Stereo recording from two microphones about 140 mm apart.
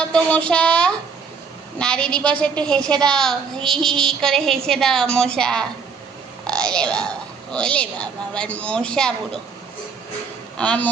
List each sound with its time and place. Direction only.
0.1 s a woman's voice: 10° left (ahead or behind)
10.6 s a woman's voice: 10° left (ahead or behind)